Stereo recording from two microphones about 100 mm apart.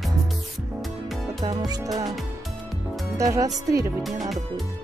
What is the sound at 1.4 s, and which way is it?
Music, 45° right (ahead or behind).